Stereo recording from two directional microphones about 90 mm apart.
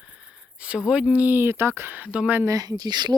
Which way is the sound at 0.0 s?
10° right (ahead or behind).